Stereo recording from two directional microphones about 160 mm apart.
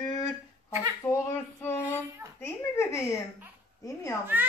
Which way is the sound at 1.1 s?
15° left (ahead or behind).